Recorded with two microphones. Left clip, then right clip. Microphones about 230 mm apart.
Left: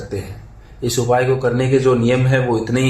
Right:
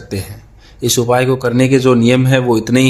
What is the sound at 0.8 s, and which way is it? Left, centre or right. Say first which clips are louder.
A man's voice: right 3 dB; right.